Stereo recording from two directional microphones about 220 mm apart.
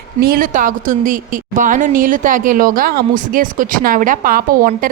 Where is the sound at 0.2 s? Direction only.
40° right (ahead or behind).